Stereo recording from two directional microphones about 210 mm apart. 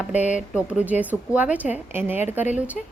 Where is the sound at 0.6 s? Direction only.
5° right (ahead or behind).